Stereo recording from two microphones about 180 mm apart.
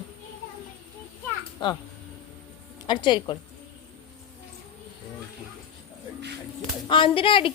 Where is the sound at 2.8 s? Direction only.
25° left (ahead or behind).